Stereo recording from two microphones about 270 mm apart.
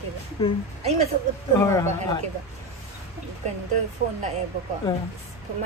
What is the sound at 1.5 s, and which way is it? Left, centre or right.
Speech, centre.